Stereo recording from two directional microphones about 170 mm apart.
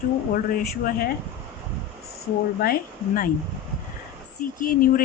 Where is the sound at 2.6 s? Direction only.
60° left (ahead or behind).